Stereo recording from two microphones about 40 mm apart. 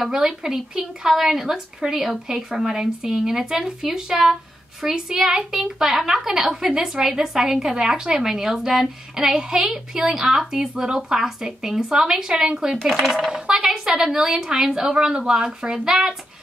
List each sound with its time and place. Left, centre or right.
0.0 s a woman's voice: centre